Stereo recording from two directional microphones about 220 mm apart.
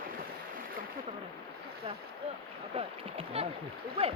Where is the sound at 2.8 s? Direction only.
25° right (ahead or behind).